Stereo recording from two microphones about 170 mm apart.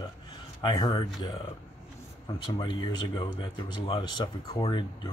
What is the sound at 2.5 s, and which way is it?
Speech, 25° left (ahead or behind).